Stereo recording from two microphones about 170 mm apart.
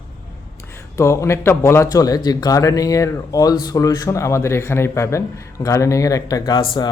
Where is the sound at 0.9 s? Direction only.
15° left (ahead or behind).